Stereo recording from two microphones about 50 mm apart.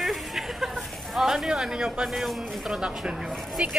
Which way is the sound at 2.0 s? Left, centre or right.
Centre.